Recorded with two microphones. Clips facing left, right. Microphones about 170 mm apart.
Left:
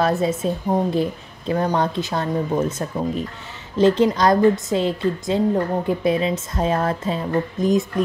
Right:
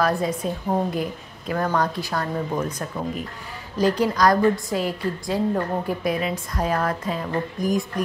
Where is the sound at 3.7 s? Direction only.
25° left (ahead or behind).